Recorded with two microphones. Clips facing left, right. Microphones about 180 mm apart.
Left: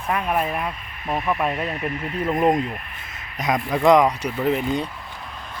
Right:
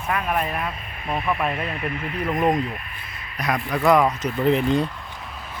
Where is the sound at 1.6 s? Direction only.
40° left (ahead or behind); by 4.9 s centre (ahead or behind).